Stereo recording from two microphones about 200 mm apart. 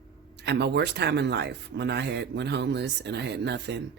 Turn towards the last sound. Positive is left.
turn(degrees=-60)  # may be behind; listen again after turning